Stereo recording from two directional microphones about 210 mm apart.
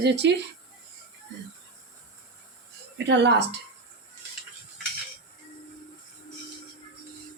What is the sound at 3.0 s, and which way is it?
Speech, 55° right (ahead or behind).